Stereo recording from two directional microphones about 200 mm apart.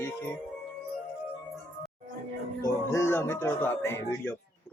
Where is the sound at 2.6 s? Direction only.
15° left (ahead or behind).